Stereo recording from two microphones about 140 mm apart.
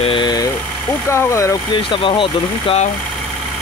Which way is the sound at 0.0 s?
35° left (ahead or behind).